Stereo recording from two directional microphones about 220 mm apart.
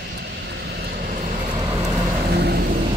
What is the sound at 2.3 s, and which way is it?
Vehicle, 45° right (ahead or behind).